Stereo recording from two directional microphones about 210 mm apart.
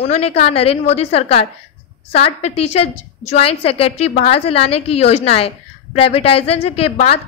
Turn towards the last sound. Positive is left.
turn(degrees=30)  # may be behind; listen again after turning